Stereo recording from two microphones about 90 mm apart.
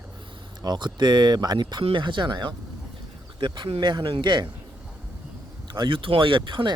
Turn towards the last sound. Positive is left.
turn(degrees=-60)  # may be behind; listen again after turning